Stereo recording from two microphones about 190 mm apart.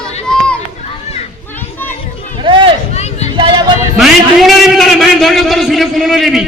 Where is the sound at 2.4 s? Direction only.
25° right (ahead or behind).